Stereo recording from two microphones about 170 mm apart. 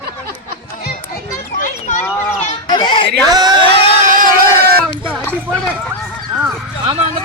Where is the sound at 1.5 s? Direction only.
45° left (ahead or behind).